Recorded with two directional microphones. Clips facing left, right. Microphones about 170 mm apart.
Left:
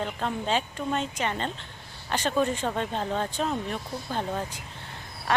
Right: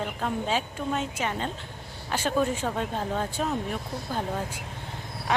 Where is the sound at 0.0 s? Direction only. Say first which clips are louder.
Even; 5° right (ahead or behind).